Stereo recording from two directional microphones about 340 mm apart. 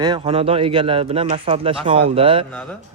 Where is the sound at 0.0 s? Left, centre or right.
Centre.